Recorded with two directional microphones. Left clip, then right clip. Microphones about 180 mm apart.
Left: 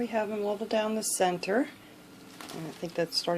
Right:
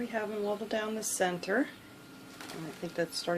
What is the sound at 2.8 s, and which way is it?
Speech, 30° left (ahead or behind).